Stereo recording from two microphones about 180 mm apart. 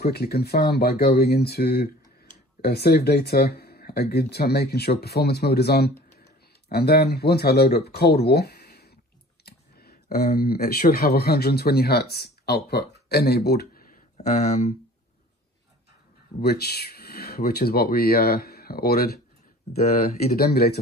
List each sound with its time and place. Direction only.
0.0 s speech: 60° left (ahead or behind)
14.2 s speech: 35° left (ahead or behind)
16.3 s speech: 60° left (ahead or behind)